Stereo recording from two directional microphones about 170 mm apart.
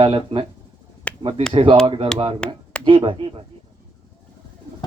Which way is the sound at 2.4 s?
5° left (ahead or behind).